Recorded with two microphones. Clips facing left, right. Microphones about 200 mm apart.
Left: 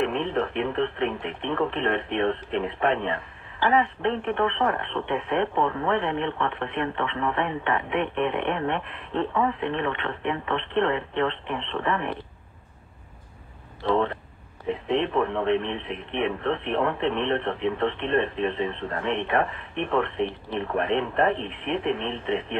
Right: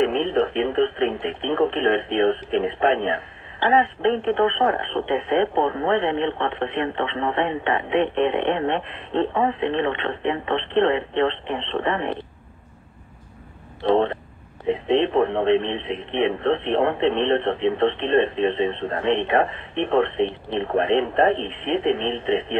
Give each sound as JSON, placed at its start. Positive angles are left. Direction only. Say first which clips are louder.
{"t": 0.0, "sound": "speech", "louder": "right 5 dB", "side_deg": -25}
{"t": 13.8, "sound": "speech", "louder": "right 5 dB", "side_deg": -25}